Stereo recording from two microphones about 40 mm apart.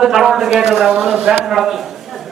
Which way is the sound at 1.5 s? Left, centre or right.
Centre.